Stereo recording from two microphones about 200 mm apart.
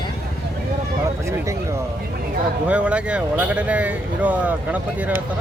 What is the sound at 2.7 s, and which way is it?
Speech, 5° right (ahead or behind).